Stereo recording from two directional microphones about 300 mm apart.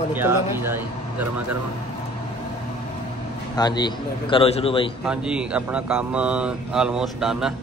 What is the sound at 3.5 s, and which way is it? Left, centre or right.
A man's voice, centre.